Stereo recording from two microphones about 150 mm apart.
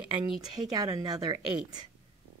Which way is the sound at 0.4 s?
25° right (ahead or behind).